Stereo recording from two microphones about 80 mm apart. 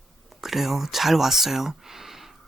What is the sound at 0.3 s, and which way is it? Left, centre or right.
Speech, centre.